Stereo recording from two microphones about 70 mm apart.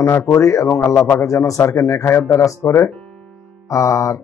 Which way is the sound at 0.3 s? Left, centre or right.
Left.